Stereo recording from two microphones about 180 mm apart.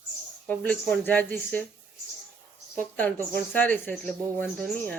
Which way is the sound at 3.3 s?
10° left (ahead or behind).